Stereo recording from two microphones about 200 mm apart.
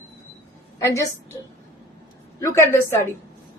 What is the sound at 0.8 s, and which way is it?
Speech, 15° left (ahead or behind).